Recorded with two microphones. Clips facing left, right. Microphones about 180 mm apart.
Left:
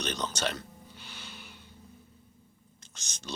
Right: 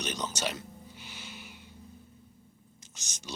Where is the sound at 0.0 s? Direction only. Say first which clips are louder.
Left 1 dB; 10° right (ahead or behind).